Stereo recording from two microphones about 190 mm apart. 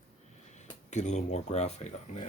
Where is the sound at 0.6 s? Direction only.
40° left (ahead or behind).